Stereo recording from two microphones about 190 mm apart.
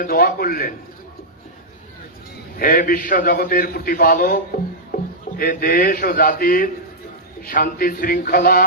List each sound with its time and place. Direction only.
0.0 s a man's voice: 50° left (ahead or behind)
2.6 s a man's voice: 50° left (ahead or behind)
5.4 s a man's voice: 50° left (ahead or behind)